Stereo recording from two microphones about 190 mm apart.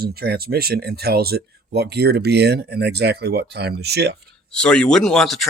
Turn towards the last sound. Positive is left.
turn(degrees=0)  # may be behind; listen again after turning